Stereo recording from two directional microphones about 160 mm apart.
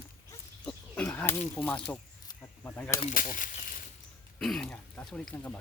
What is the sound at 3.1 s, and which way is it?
Speech, 55° left (ahead or behind).